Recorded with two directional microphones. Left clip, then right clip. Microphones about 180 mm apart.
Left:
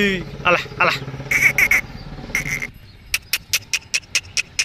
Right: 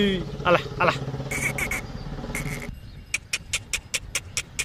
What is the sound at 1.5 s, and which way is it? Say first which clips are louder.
Bird: left 13 dB; centre (ahead or behind).